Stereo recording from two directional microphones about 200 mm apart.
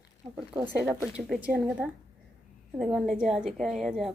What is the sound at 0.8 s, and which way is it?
A woman's voice, 5° right (ahead or behind).